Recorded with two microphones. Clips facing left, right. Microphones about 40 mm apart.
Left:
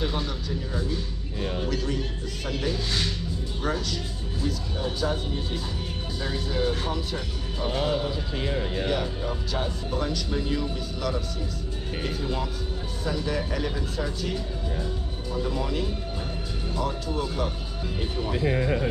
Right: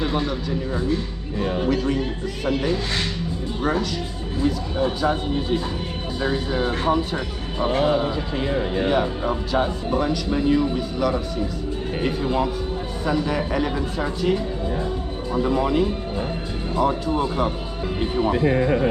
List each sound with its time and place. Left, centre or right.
0.0 s speech: centre